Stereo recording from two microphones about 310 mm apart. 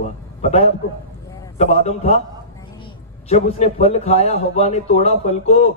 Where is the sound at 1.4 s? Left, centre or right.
Left.